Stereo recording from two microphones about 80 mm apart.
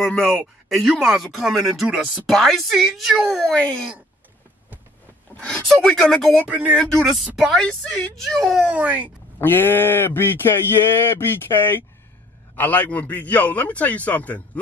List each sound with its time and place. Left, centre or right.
0.0 s speech: centre
3.4 s speech: centre
5.4 s speech: centre
6.4 s speech: centre
6.8 s speech: centre
8.6 s speech: centre
9.4 s speech: left